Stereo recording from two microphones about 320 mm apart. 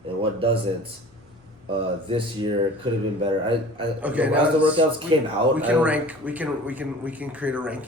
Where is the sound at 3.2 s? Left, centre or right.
Centre.